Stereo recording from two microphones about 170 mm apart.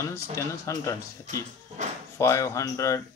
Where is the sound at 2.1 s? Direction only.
20° left (ahead or behind).